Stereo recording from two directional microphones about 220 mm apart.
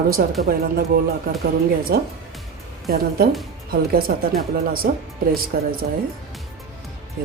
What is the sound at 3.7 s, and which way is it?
Speech, 40° right (ahead or behind).